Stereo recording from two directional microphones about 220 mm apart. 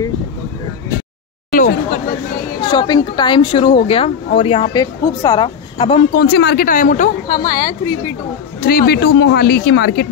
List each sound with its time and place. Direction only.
1.5 s chatter: 35° left (ahead or behind)
2.6 s a woman's voice: 20° left (ahead or behind)
6.1 s speech: 50° left (ahead or behind)
8.5 s speech: 45° left (ahead or behind)